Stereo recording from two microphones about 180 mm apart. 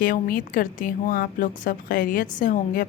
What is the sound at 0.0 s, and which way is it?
A woman's voice, 50° left (ahead or behind).